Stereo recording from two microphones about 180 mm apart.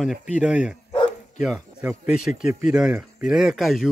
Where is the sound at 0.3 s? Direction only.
5° right (ahead or behind).